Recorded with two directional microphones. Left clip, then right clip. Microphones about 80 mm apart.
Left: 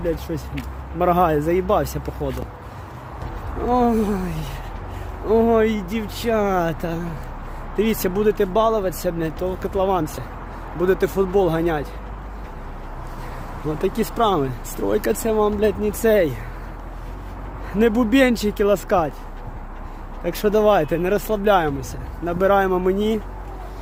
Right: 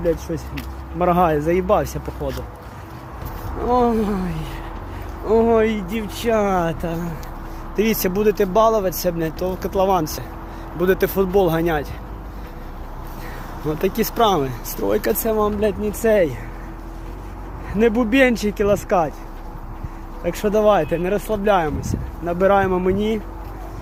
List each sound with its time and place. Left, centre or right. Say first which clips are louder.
0.9 s speech: even; left
3.7 s speech: right 1 dB; left
5.3 s speech: right 1 dB; left
6.1 s speech: right 2 dB; centre
6.5 s speech: right 1 dB; left
7.8 s speech: right 1 dB; centre
13.7 s speech: right 2 dB; centre
15.6 s speech: even; left
17.7 s speech: right 1 dB; left
20.2 s speech: right 1 dB; left
22.3 s speech: right 1 dB; left